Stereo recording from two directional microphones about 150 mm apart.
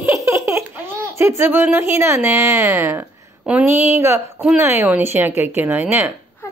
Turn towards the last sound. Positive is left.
turn(degrees=-15)  # may be behind; listen again after turning